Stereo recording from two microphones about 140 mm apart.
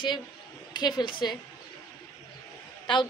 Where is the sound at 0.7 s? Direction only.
30° left (ahead or behind).